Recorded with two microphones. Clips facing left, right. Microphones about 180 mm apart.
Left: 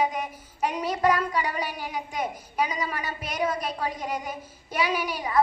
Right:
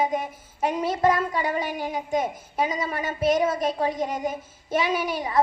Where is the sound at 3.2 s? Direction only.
45° right (ahead or behind).